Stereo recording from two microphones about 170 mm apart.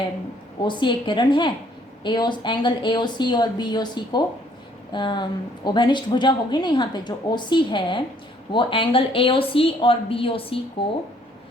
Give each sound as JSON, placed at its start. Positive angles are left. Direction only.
{"t": 0.6, "sound": "a woman's voice", "side_deg": 25}